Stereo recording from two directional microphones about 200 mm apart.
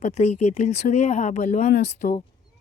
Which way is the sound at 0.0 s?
30° left (ahead or behind).